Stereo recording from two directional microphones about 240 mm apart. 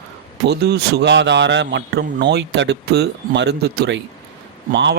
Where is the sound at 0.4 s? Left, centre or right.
Right.